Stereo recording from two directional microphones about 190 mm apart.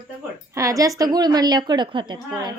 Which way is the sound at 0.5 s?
15° right (ahead or behind).